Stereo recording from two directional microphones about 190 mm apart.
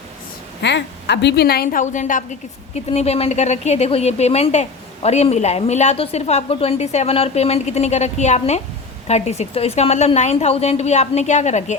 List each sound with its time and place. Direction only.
0.6 s a woman's voice: 65° left (ahead or behind); by 11.8 s 35° left (ahead or behind)